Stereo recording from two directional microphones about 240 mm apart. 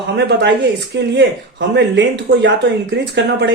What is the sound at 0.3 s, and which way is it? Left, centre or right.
Speech, right.